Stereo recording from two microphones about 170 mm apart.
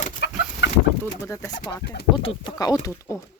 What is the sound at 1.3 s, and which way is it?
Speech, 20° left (ahead or behind).